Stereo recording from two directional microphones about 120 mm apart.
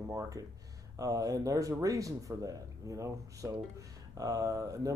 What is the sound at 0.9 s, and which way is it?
Speech, 30° right (ahead or behind).